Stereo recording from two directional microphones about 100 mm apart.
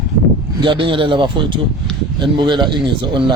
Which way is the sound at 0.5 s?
55° right (ahead or behind).